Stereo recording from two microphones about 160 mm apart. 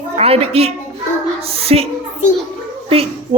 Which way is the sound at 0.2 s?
40° right (ahead or behind).